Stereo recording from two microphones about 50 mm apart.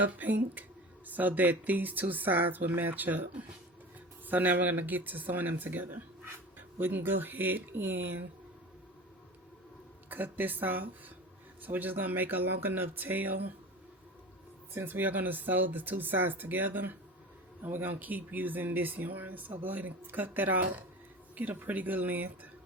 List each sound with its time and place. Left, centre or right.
0.1 s speech: right
10.1 s speech: right
14.7 s speech: right